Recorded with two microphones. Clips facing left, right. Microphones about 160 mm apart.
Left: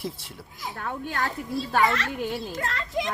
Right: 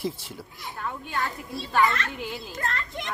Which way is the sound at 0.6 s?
75° left (ahead or behind).